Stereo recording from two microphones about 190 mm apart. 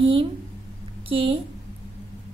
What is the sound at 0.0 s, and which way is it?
A woman's voice, 30° right (ahead or behind).